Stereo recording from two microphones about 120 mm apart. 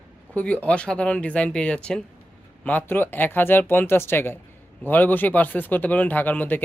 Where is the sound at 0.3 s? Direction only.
10° left (ahead or behind).